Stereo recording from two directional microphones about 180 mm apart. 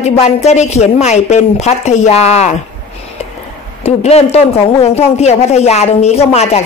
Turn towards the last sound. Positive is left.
turn(degrees=35)  # may be behind; listen again after turning